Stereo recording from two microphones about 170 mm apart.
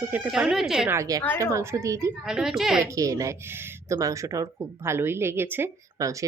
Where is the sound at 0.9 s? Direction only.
20° right (ahead or behind).